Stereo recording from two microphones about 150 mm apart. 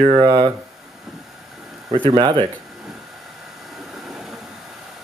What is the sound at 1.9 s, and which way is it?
Speech, 30° right (ahead or behind).